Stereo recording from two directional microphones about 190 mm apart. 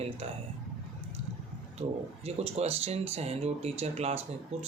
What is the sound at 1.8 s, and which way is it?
Speech, 30° right (ahead or behind).